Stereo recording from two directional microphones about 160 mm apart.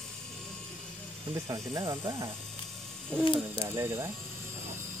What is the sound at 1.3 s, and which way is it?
Speech, 20° right (ahead or behind).